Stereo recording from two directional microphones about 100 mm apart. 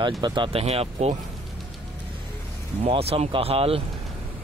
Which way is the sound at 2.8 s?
85° right.